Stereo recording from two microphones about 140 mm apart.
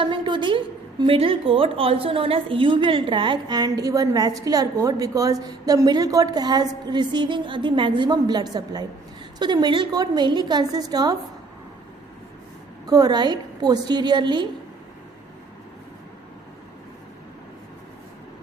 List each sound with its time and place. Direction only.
0.0 s a woman's voice: 35° right (ahead or behind)
12.9 s a woman's voice: 30° right (ahead or behind)